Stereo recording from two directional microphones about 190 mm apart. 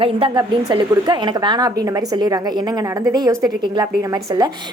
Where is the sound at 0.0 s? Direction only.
25° right (ahead or behind).